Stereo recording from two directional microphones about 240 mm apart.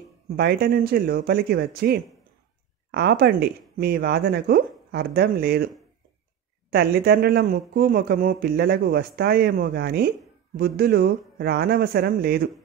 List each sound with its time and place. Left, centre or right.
0.4 s speech: right
6.7 s speech: right